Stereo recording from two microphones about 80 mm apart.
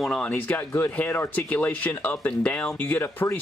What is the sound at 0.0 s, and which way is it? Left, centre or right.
Speech, centre.